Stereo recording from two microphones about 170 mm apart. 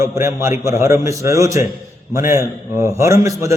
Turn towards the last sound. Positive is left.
turn(degrees=-15)  # may be behind; listen again after turning